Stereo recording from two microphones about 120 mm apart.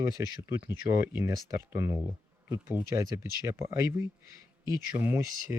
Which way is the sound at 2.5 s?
20° right (ahead or behind).